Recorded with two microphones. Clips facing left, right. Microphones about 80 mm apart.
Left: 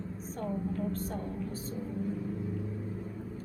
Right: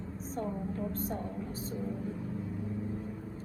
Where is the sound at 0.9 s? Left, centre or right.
Left.